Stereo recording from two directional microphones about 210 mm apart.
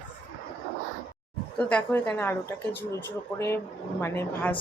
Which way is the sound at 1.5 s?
5° left (ahead or behind).